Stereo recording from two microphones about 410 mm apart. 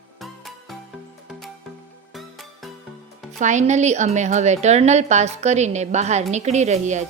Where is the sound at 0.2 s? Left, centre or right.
Centre.